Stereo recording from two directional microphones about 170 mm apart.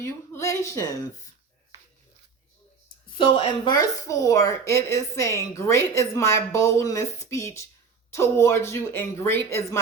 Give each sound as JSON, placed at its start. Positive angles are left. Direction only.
{"t": 0.0, "sound": "speech", "side_deg": 15}
{"t": 3.2, "sound": "speech", "side_deg": 35}